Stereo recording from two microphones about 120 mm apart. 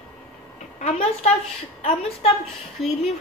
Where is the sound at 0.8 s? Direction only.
60° left (ahead or behind).